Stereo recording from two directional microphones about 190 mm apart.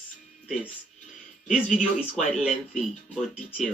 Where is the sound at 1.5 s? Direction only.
5° right (ahead or behind).